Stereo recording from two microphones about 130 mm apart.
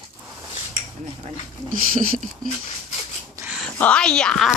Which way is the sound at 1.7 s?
85° right.